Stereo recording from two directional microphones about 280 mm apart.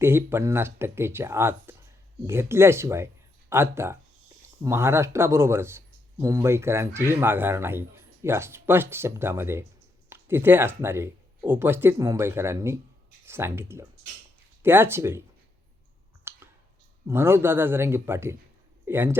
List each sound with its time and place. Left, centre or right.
0.0 s speech: centre
16.3 s clicking: centre
17.1 s speech: centre